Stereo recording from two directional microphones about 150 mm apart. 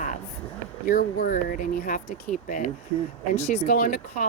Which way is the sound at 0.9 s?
70° left (ahead or behind).